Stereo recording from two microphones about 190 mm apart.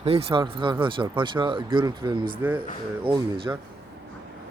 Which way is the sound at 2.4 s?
10° right (ahead or behind).